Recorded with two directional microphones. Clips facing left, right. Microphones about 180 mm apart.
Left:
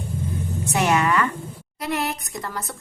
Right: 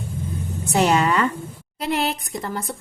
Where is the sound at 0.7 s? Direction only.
30° right (ahead or behind).